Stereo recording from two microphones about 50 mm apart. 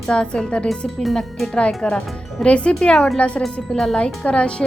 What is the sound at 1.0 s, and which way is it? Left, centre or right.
Speech, centre.